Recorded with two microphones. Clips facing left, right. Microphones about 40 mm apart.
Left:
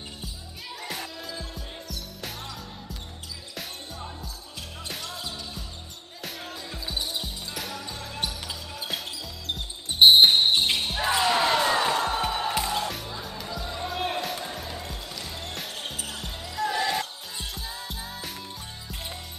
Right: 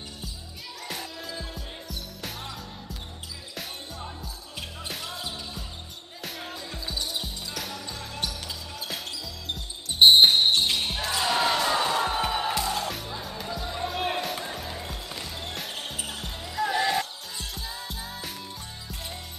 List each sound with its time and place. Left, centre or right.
0.8 s music: centre
3.5 s music: centre
7.2 s basketball bounce: centre
10.4 s basketball bounce: left; by 12.5 s centre
12.5 s music: centre
12.8 s music: centre
16.1 s basketball bounce: centre
16.4 s music: centre